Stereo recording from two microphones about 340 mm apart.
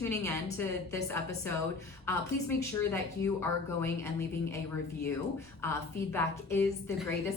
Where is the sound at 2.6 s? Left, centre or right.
Centre.